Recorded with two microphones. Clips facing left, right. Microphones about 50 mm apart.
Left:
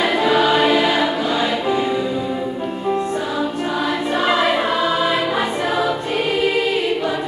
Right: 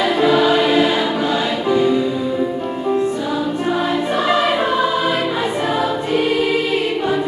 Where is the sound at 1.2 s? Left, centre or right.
Centre.